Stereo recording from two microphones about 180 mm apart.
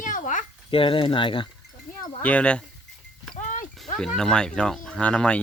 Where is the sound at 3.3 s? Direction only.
45° left (ahead or behind).